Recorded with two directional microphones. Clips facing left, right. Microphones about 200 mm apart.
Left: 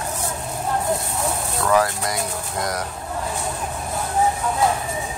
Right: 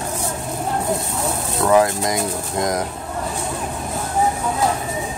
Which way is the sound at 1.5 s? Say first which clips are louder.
Right 4 dB; 20° right (ahead or behind).